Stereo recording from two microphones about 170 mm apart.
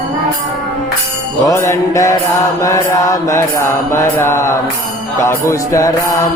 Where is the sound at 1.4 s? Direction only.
15° left (ahead or behind).